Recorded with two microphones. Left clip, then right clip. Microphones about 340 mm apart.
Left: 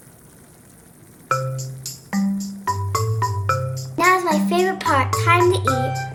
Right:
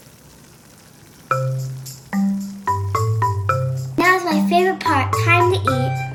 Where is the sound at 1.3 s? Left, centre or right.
Centre.